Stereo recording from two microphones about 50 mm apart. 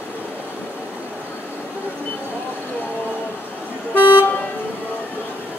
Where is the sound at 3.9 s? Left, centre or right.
Left.